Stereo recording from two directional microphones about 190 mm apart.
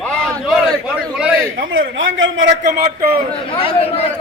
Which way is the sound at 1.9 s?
90° right.